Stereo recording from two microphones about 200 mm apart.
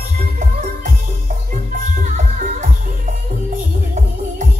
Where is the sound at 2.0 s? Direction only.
40° right (ahead or behind).